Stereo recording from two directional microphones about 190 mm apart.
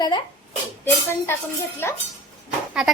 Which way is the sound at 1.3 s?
15° left (ahead or behind).